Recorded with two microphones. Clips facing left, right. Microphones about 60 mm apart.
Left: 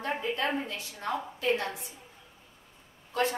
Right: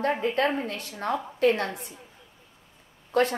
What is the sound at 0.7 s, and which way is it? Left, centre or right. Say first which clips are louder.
A woman's voice: right 5 dB; right.